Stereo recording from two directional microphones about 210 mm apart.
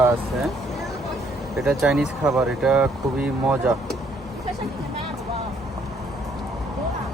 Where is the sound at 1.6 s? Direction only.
Centre (ahead or behind).